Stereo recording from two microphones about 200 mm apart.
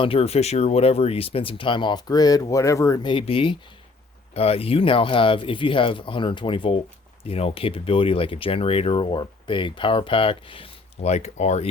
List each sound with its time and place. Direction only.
0.0 s speech: 30° left (ahead or behind)